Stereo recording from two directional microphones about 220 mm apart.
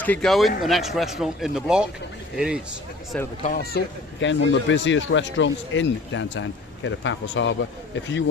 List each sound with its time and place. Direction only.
0.0 s speech: 5° left (ahead or behind)
3.4 s speech: 40° left (ahead or behind); by 8.2 s 55° left (ahead or behind)